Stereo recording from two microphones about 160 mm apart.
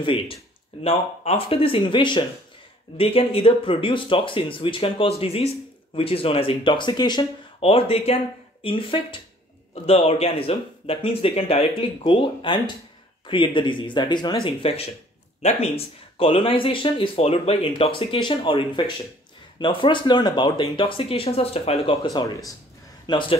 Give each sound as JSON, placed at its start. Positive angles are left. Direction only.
{"t": 0.0, "sound": "speech", "side_deg": 35}
{"t": 22.0, "sound": "a man's voice", "side_deg": 25}